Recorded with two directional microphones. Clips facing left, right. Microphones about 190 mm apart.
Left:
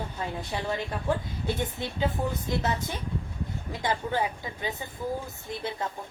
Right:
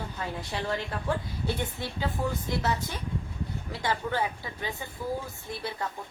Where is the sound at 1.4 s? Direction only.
20° left (ahead or behind).